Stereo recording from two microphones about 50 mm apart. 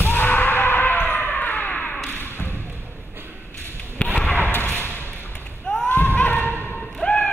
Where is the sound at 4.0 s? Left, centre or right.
Left.